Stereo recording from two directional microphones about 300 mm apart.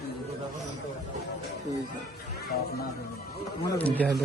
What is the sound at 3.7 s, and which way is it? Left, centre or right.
Speech, centre.